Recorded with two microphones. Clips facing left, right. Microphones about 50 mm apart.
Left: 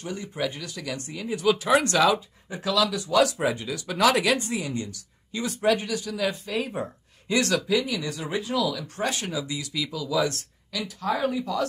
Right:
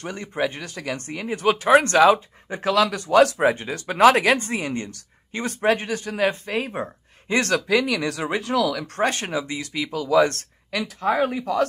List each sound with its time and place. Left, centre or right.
0.0 s speech: right
7.6 s speech: right
9.0 s speech: right